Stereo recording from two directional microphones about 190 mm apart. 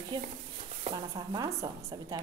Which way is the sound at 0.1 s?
20° right (ahead or behind).